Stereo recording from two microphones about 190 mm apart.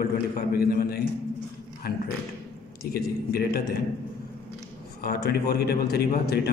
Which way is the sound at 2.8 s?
55° left (ahead or behind).